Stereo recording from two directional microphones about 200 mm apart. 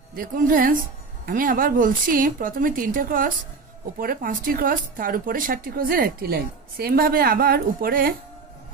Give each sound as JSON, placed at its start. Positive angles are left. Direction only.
{"t": 0.1, "sound": "speech", "side_deg": -45}